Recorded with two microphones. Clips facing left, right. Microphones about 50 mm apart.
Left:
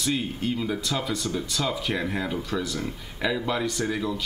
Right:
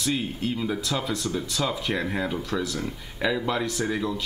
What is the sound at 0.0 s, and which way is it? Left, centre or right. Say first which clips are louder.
Speech: even; centre.